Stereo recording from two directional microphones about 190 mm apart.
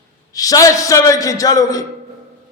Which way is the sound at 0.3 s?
20° left (ahead or behind).